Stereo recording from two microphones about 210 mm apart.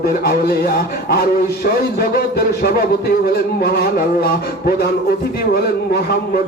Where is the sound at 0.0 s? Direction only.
45° left (ahead or behind).